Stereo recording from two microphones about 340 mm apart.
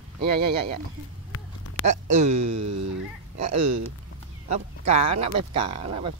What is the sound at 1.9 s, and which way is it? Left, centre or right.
Speech, right.